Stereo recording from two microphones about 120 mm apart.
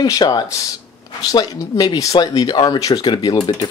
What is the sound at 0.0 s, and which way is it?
Speech, 35° left (ahead or behind).